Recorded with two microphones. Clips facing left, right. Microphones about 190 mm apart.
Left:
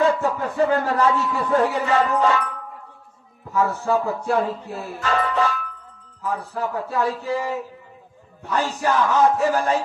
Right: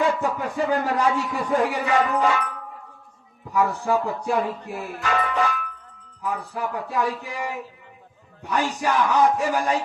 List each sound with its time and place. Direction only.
0.2 s a man's voice: 15° right (ahead or behind)
3.5 s music: 15° right (ahead or behind)
8.8 s music: 15° right (ahead or behind)